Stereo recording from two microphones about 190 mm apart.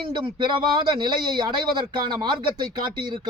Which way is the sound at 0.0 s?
25° right (ahead or behind).